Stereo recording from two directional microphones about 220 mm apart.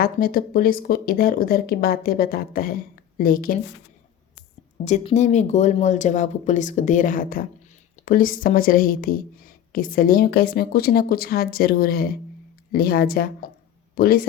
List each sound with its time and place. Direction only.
0.0 s a woman's voice: 40° left (ahead or behind)
4.9 s a woman's voice: 30° left (ahead or behind)